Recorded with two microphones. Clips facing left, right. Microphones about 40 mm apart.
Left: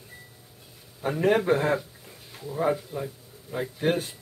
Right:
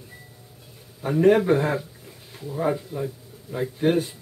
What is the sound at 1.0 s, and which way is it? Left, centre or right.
Speech, centre.